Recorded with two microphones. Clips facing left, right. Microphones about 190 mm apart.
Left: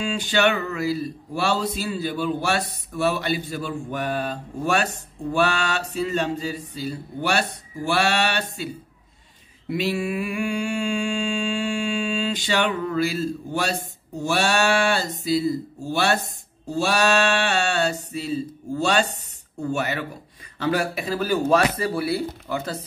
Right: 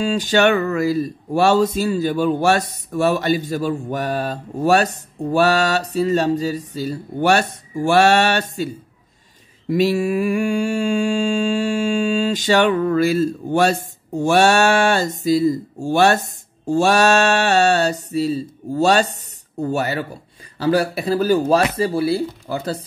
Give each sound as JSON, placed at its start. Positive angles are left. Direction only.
{"t": 0.0, "sound": "speech", "side_deg": -40}
{"t": 5.3, "sound": "mantra", "side_deg": -40}
{"t": 9.7, "sound": "mantra", "side_deg": -40}
{"t": 14.2, "sound": "speech", "side_deg": -50}
{"t": 19.6, "sound": "mantra", "side_deg": -35}